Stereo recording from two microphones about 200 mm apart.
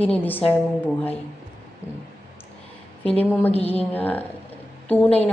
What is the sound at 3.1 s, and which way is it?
Speech, 5° left (ahead or behind).